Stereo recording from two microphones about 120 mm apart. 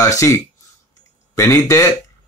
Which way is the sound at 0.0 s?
25° left (ahead or behind).